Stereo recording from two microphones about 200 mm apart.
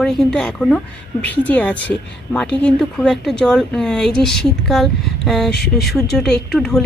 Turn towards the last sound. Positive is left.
turn(degrees=5)  # may be behind; listen again after turning